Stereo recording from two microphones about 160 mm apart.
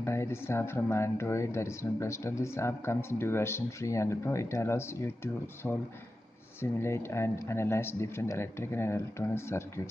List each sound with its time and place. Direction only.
0.0 s speech: 15° left (ahead or behind)